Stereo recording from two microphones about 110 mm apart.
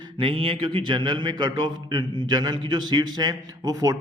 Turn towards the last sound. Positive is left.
turn(degrees=-35)  # may be behind; listen again after turning